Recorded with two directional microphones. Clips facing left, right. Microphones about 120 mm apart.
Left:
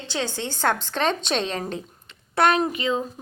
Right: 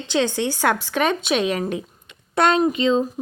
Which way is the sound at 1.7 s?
20° right (ahead or behind).